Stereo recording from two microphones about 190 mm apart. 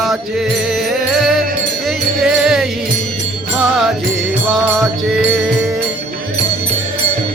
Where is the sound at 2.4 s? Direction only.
Centre (ahead or behind).